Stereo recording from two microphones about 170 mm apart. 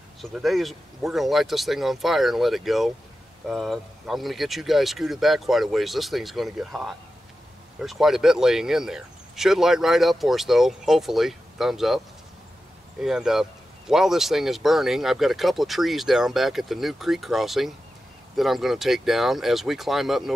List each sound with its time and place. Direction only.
0.2 s speech: centre (ahead or behind)
13.0 s speech: 5° right (ahead or behind)